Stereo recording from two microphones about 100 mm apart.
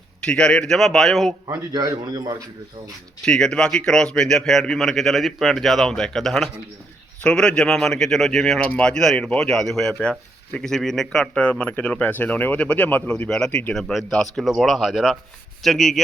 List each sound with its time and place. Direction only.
0.3 s a man's voice: 10° left (ahead or behind)
1.7 s a man's voice: 40° right (ahead or behind)
3.2 s a man's voice: 5° left (ahead or behind)